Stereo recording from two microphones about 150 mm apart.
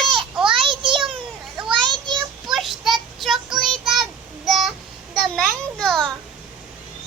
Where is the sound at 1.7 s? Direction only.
30° right (ahead or behind).